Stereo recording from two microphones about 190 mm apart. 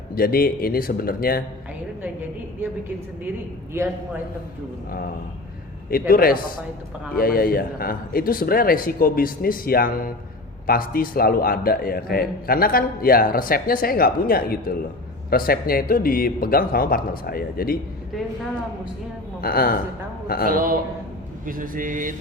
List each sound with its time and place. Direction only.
0.1 s a man's voice: 50° left (ahead or behind)
5.9 s a man's voice: 50° left (ahead or behind)
19.4 s a man's voice: 50° left (ahead or behind)
20.5 s a man's voice: 50° right (ahead or behind)